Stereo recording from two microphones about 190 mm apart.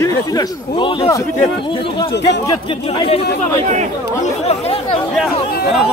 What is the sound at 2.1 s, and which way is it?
Speech, 65° left (ahead or behind).